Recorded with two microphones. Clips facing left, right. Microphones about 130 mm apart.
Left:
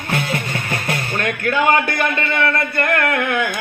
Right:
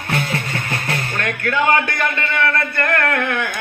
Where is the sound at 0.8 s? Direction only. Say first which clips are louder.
Left 3 dB; 20° left (ahead or behind).